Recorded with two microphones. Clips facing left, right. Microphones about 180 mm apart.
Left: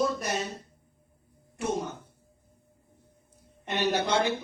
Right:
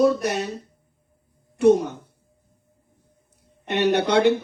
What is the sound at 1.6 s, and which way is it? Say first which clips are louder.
Speech: right 14 dB; 65° right (ahead or behind).